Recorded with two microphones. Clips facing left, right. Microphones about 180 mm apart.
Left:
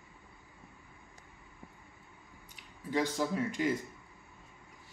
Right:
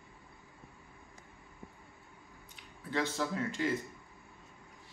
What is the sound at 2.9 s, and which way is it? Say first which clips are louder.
Speech: left 2 dB; 10° left (ahead or behind).